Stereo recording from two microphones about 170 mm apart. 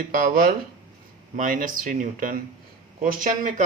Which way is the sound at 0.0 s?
60° right (ahead or behind).